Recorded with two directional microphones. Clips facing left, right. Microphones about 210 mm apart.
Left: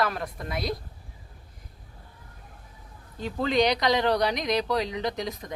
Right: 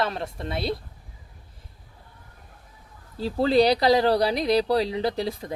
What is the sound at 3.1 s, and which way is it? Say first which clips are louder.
Speech: right 5 dB; 35° right (ahead or behind).